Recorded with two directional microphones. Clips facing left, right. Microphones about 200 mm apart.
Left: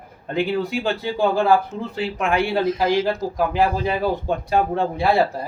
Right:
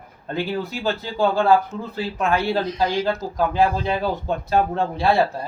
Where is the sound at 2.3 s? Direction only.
15° left (ahead or behind).